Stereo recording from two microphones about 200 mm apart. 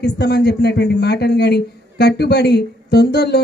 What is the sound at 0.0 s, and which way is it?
Speech, 55° left (ahead or behind).